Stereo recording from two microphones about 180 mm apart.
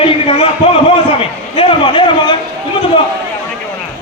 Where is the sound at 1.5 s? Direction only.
30° left (ahead or behind).